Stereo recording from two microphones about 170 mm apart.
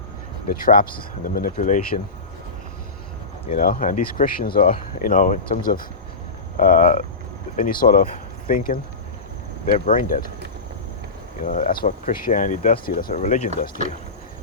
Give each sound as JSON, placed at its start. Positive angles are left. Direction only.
{"t": 0.5, "sound": "speech", "side_deg": 55}
{"t": 3.6, "sound": "speech", "side_deg": 55}
{"t": 11.4, "sound": "speech", "side_deg": 50}